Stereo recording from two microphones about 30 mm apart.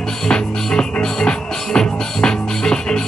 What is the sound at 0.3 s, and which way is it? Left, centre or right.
Music, left.